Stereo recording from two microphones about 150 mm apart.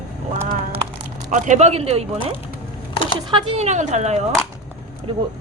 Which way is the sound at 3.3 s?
40° right (ahead or behind).